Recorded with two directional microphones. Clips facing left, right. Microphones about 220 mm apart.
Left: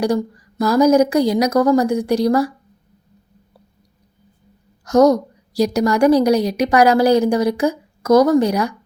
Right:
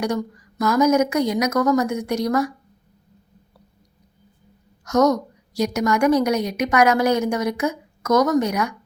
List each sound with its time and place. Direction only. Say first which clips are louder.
0.0 s a woman's voice: left 5 dB; 30° left (ahead or behind)
4.9 s a woman's voice: left 5 dB; 30° left (ahead or behind)